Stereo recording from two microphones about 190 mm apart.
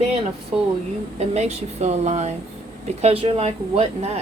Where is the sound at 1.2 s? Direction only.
35° right (ahead or behind).